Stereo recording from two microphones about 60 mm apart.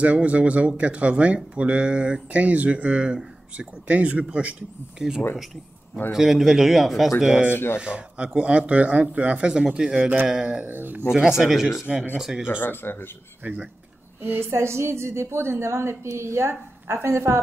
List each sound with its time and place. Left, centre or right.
0.0 s speech: right
6.1 s a man's voice: centre
7.5 s speech: left
7.8 s speech: centre
10.6 s speech: right
11.1 s speech: centre
12.4 s speech: left
13.4 s speech: right
14.5 s a woman's voice: right